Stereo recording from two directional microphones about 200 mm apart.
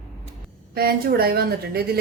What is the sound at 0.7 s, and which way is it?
A woman's voice, 50° right (ahead or behind).